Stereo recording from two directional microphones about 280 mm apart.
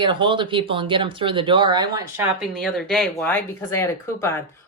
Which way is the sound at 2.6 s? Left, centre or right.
Centre.